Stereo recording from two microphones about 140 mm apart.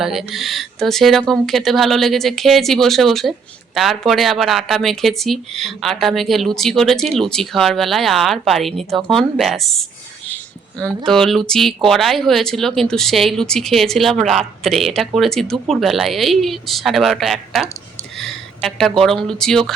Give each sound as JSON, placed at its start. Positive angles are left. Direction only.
{"t": 0.0, "sound": "speech", "side_deg": -5}